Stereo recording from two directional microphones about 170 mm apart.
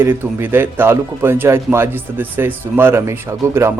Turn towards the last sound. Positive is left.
turn(degrees=-15)  # may be behind; listen again after turning